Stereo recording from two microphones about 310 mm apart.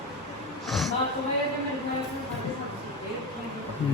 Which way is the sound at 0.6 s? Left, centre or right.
Centre.